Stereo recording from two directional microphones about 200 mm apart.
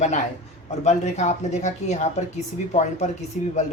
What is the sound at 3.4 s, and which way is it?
Speech, 40° left (ahead or behind).